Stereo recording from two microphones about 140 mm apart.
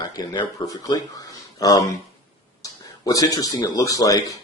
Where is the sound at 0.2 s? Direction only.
30° left (ahead or behind).